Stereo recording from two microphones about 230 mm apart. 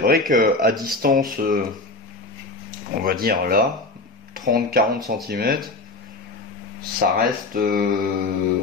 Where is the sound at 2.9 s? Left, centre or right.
Right.